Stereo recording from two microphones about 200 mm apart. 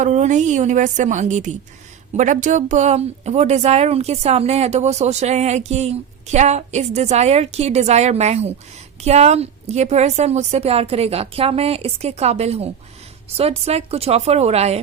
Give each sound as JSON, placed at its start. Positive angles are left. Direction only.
{"t": 0.0, "sound": "speech", "side_deg": -35}